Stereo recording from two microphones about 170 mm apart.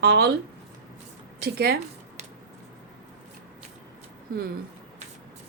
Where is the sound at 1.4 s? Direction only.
65° right (ahead or behind).